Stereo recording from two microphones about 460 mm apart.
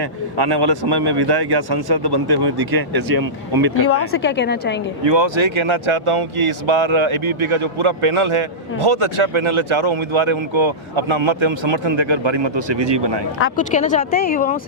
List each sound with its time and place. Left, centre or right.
0.0 s a man's voice: right
3.8 s a woman's voice: left
5.0 s speech: right
13.4 s speech: centre